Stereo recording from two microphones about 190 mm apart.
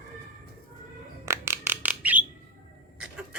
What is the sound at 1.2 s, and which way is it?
Bird, 15° right (ahead or behind).